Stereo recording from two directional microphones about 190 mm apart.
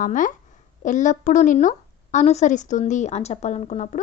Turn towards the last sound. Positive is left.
turn(degrees=40)  # may be behind; listen again after turning